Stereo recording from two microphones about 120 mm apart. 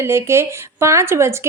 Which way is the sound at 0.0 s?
20° right (ahead or behind).